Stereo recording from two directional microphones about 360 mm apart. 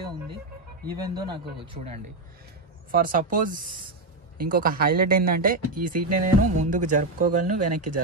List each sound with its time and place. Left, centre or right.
0.9 s speech: centre
5.8 s speech: right
6.7 s speech: right
7.6 s speech: right